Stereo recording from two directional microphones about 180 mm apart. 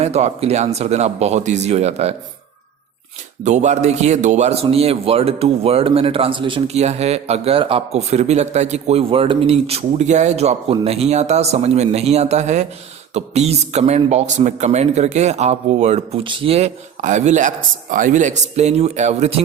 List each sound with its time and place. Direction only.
0.0 s speech: 35° right (ahead or behind)
3.4 s speech: 40° right (ahead or behind)